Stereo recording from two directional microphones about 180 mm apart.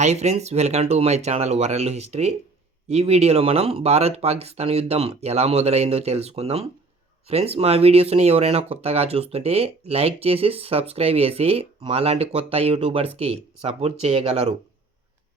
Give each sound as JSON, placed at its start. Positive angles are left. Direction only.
{"t": 0.0, "sound": "speech", "side_deg": -40}